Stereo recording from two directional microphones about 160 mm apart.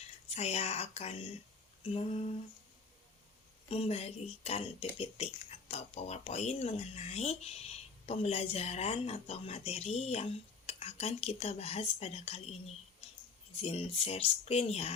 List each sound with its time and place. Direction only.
0.3 s speech: 40° left (ahead or behind)
3.7 s speech: 40° left (ahead or behind)